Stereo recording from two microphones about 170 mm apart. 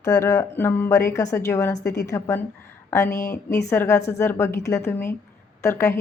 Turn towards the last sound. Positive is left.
turn(degrees=15)  # may be behind; listen again after turning